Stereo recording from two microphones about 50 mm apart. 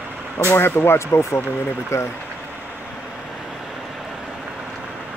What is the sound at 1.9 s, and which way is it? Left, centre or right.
Speech, left.